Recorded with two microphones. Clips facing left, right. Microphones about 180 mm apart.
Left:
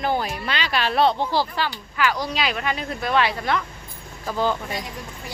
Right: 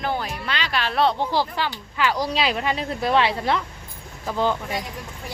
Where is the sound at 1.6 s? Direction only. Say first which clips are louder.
Left 1 dB; 25° right (ahead or behind).